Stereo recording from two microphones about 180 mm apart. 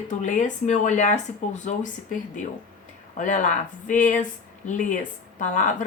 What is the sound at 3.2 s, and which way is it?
Speech, 45° left (ahead or behind).